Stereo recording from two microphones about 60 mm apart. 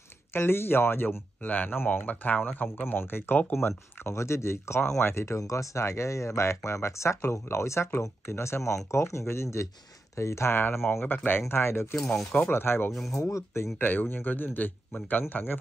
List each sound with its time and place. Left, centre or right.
0.3 s speech: left
2.8 s speech: left
3.6 s speech: left
5.4 s speech: left
7.2 s speech: left
10.9 s speech: left
12.9 s speech: centre
13.2 s speech: left
13.7 s speech: left